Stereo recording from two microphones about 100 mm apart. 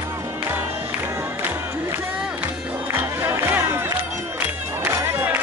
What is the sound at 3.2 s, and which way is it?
Music, 20° right (ahead or behind).